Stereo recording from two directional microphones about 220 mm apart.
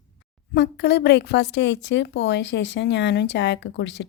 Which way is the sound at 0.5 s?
50° left (ahead or behind).